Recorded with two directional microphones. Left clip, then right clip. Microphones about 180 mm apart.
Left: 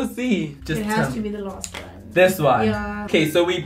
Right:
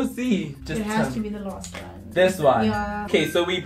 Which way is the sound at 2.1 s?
30° left (ahead or behind).